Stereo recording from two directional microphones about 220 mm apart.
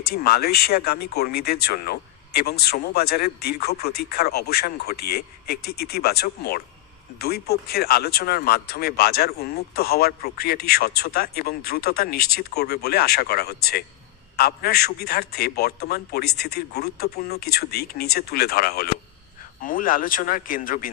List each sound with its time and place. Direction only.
0.0 s speech: 45° left (ahead or behind)